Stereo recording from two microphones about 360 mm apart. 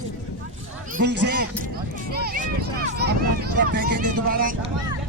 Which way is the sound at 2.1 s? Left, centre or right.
Right.